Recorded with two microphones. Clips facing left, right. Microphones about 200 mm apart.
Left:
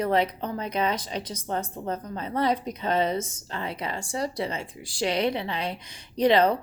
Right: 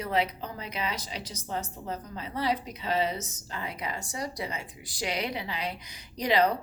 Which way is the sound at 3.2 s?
30° left (ahead or behind).